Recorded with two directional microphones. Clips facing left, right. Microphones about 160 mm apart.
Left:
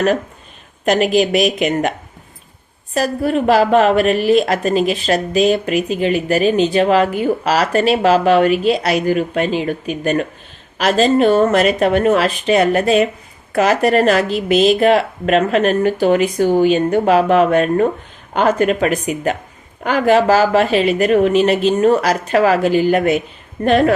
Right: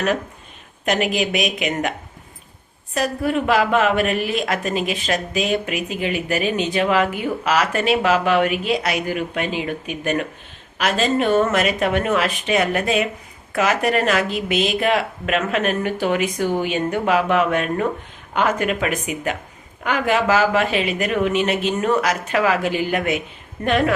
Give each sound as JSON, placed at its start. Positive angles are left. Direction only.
{"t": 0.9, "sound": "a woman's voice", "side_deg": 35}
{"t": 2.9, "sound": "a woman's voice", "side_deg": 35}